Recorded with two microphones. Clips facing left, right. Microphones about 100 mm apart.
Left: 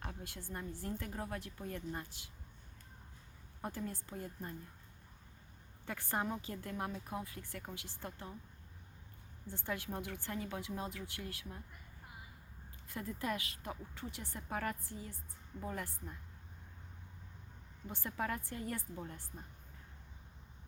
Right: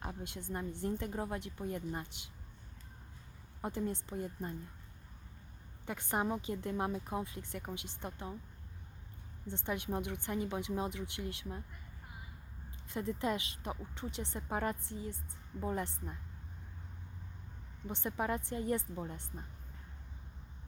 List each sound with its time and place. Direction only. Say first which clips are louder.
0.0 s a woman's voice: right 4 dB; 20° right (ahead or behind)
3.6 s a woman's voice: right 5 dB; 20° right (ahead or behind)
5.8 s a woman's voice: right 3 dB; 20° right (ahead or behind)
9.5 s a woman's voice: right 4 dB; 20° right (ahead or behind)
12.9 s a woman's voice: right 4 dB; 25° right (ahead or behind)
17.8 s a woman's voice: right 4 dB; 20° right (ahead or behind)